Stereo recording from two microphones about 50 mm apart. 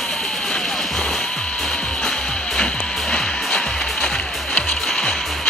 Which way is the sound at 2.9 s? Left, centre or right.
Centre.